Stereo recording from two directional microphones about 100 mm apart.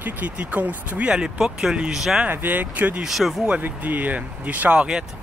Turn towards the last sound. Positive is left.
turn(degrees=-10)  # may be behind; listen again after turning